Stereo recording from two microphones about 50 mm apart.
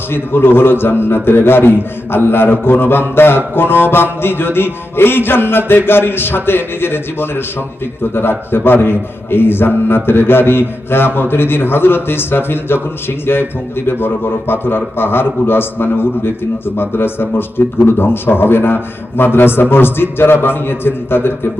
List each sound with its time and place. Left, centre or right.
0.1 s a man's voice: left